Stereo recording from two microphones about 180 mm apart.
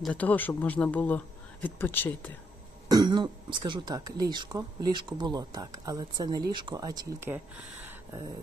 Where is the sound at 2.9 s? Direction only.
20° right (ahead or behind).